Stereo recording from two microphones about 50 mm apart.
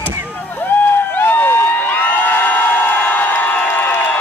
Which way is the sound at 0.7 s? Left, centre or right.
Left.